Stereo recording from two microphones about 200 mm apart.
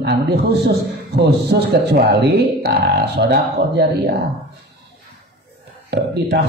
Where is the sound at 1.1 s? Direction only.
55° right (ahead or behind).